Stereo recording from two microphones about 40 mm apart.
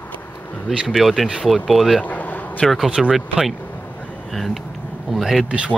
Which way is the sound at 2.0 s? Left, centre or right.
Left.